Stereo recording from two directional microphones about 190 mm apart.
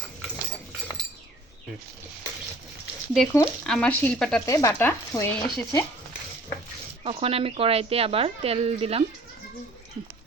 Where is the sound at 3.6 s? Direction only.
5° left (ahead or behind).